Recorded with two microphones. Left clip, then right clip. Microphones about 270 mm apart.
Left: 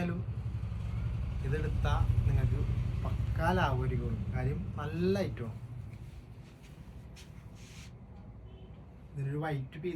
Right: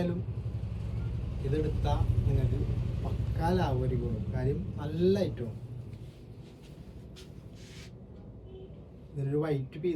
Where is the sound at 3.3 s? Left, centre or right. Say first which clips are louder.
Even; centre.